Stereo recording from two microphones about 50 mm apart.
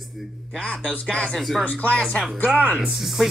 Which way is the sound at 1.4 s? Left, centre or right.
Centre.